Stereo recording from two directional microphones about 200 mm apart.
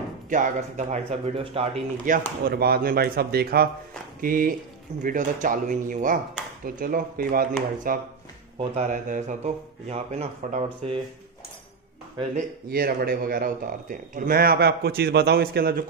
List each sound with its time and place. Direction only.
0.3 s speech: 40° right (ahead or behind)
8.5 s speech: 35° right (ahead or behind)
12.4 s speech: 50° right (ahead or behind)